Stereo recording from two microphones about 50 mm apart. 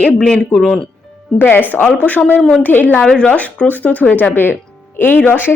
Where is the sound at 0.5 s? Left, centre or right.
Centre.